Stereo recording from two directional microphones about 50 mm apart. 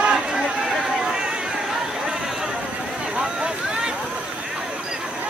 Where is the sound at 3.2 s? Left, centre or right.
Centre.